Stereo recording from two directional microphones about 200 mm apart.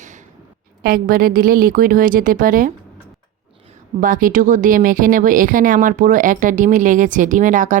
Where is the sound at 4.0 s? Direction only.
45° right (ahead or behind).